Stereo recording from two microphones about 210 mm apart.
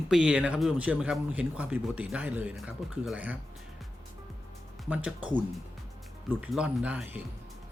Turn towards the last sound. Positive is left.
turn(degrees=-5)  # may be behind; listen again after turning